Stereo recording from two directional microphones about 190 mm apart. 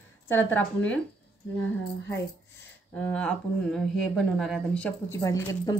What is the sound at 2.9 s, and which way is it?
Speech, 5° left (ahead or behind).